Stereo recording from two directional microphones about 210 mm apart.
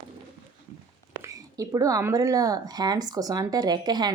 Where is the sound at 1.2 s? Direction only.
15° right (ahead or behind).